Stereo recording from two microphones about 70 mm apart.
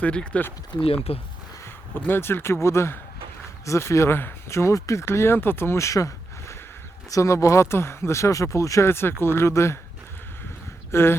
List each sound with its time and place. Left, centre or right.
0.0 s speech: centre
2.0 s speech: left
10.9 s speech: left